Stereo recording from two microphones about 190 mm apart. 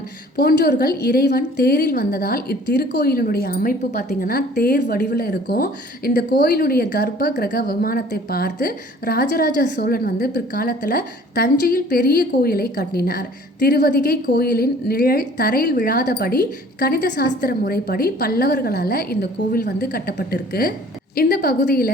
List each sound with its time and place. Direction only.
0.3 s a woman's voice: 55° left (ahead or behind)